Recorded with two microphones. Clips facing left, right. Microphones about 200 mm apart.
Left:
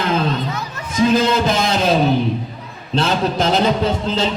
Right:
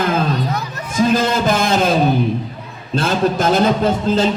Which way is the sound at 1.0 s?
50° right (ahead or behind).